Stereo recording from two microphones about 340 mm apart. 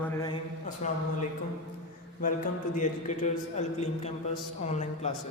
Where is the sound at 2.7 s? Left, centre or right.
Left.